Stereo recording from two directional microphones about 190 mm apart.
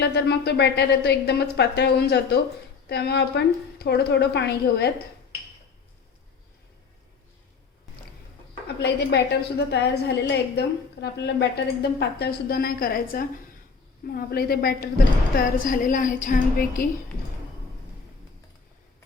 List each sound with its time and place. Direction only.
0.0 s speech: 60° left (ahead or behind)
8.6 s a woman's voice: 60° left (ahead or behind)